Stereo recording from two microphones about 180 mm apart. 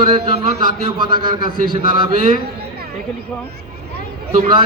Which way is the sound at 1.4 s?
55° right (ahead or behind).